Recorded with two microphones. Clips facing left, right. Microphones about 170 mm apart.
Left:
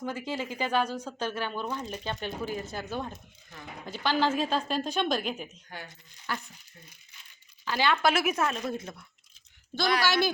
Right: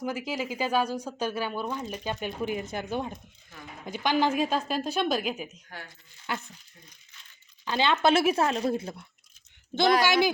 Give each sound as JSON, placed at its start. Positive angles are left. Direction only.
{"t": 0.0, "sound": "speech", "side_deg": -10}
{"t": 6.3, "sound": "speech", "side_deg": -20}
{"t": 7.6, "sound": "speech", "side_deg": -20}
{"t": 10.0, "sound": "speech", "side_deg": -15}